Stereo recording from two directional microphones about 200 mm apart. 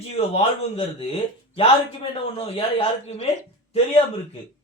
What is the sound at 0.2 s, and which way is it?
Speech, 30° left (ahead or behind).